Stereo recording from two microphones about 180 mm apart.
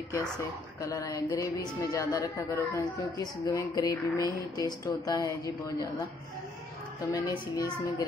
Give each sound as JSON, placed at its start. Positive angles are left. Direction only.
{"t": 0.7, "sound": "speech", "side_deg": 20}
{"t": 7.1, "sound": "speech", "side_deg": 20}